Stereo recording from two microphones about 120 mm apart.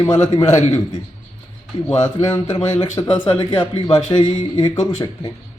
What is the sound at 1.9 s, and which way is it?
A man's voice, 25° left (ahead or behind).